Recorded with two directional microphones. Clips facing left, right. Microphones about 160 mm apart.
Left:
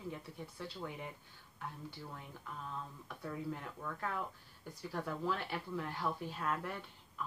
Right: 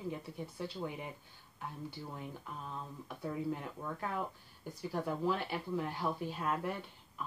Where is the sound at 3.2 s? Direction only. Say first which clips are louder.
Right 4 dB; 20° right (ahead or behind).